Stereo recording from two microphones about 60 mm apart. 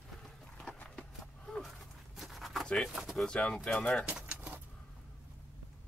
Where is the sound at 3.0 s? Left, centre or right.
Centre.